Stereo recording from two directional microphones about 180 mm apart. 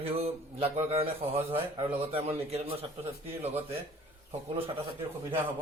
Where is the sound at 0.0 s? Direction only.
35° right (ahead or behind).